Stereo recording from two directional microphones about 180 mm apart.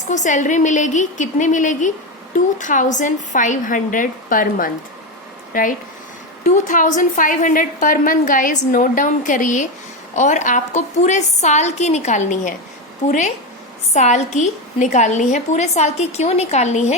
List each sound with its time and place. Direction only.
0.1 s a woman's voice: 40° left (ahead or behind)